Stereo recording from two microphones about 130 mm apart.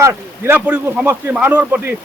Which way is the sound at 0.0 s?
20° right (ahead or behind).